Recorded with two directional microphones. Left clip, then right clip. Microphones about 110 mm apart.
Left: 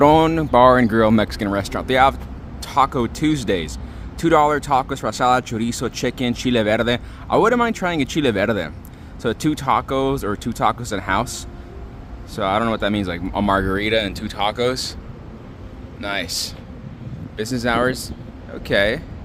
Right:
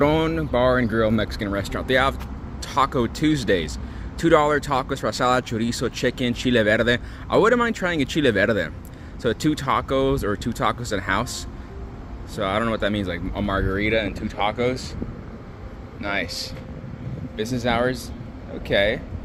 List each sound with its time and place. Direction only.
0.0 s speech: 60° left (ahead or behind)
1.6 s speech: 35° left (ahead or behind); by 13.4 s 50° left (ahead or behind)
13.4 s speech: 85° left
16.0 s speech: 90° left
17.3 s speech: 45° left (ahead or behind)
18.7 s speech: 60° left (ahead or behind)